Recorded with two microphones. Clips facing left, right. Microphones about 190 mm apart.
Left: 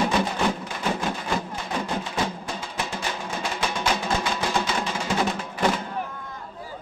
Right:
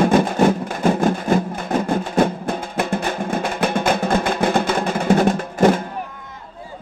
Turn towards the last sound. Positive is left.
turn(degrees=-50)  # may be behind; listen again after turning